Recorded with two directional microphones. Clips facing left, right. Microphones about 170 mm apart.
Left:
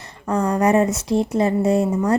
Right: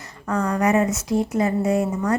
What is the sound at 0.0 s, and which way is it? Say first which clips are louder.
Speech: left 3 dB; 30° left (ahead or behind).